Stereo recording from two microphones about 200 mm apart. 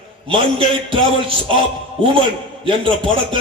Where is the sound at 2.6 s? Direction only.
25° right (ahead or behind).